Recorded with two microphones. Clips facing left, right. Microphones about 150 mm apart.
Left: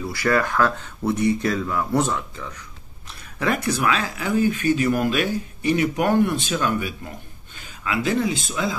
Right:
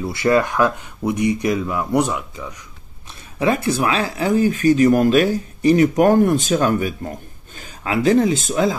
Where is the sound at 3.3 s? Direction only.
25° right (ahead or behind).